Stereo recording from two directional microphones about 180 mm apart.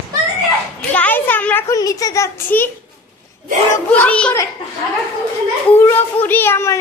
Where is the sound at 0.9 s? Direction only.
10° left (ahead or behind).